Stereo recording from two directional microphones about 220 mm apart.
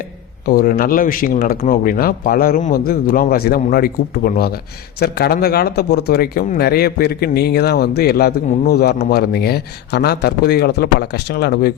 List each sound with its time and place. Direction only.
0.4 s a man's voice: 40° left (ahead or behind)